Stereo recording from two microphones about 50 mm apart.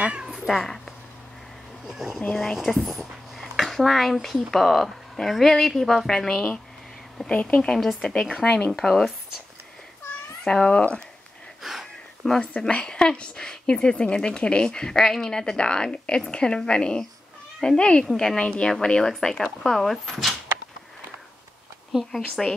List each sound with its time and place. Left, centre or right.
0.0 s cat: centre
0.5 s a woman's voice: centre
1.9 s a woman's voice: centre; by 8.4 s left
8.8 s a woman's voice: centre
10.4 s a woman's voice: centre
11.6 s wheeze: centre
12.4 s a woman's voice: left; by 20.3 s centre
22.1 s speech: centre